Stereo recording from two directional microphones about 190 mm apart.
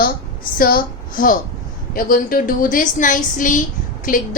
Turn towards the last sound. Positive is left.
turn(degrees=45)  # may be behind; listen again after turning